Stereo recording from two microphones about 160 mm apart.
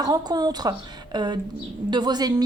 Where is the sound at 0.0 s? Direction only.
25° right (ahead or behind).